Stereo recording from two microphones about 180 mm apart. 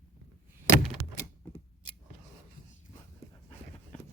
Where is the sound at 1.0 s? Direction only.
20° right (ahead or behind).